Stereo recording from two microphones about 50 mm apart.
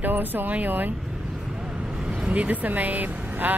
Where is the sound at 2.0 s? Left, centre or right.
Right.